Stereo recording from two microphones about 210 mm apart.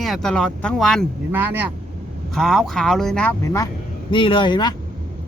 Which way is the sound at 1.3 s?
10° right (ahead or behind).